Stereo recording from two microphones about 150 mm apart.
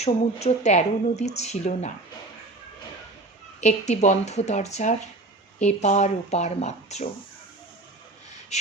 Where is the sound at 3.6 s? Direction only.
50° left (ahead or behind).